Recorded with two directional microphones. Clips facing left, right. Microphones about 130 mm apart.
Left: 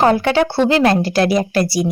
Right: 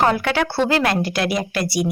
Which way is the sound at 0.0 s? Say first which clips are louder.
Left 5 dB; 30° left (ahead or behind).